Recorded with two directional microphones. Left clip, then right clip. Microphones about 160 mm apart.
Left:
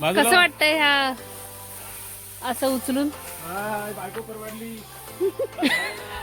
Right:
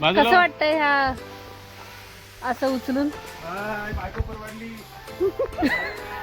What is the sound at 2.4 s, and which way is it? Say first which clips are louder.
Speech: even; 10° left (ahead or behind).